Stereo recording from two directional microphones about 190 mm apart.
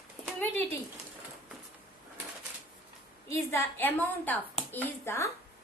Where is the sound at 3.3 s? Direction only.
10° left (ahead or behind).